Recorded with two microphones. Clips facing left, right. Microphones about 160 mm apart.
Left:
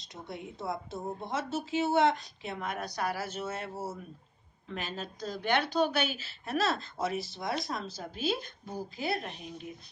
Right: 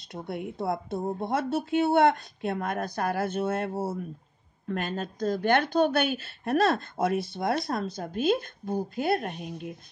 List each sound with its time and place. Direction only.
0.1 s a woman's voice: 60° right (ahead or behind)